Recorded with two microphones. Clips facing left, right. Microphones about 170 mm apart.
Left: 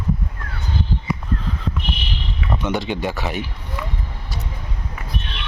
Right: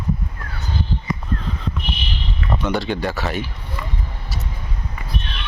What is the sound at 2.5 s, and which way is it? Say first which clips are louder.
Speech: right 1 dB; 20° left (ahead or behind).